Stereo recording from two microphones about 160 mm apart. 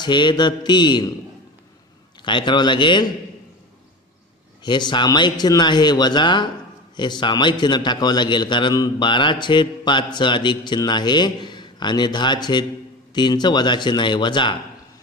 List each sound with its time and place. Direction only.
0.0 s a man's voice: 30° left (ahead or behind)
2.2 s a man's voice: 30° left (ahead or behind)
4.6 s a man's voice: 30° left (ahead or behind)